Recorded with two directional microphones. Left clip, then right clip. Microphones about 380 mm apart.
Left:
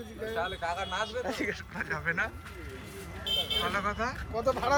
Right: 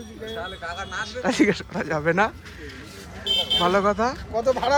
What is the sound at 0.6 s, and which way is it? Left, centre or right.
Speech, centre.